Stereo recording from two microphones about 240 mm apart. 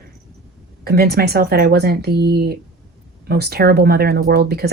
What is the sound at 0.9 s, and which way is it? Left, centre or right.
A woman's voice, right.